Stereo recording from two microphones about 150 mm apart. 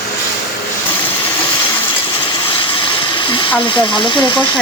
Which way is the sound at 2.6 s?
35° left (ahead or behind).